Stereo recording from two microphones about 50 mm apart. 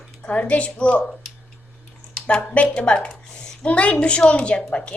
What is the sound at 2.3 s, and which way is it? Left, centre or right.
Speech, left.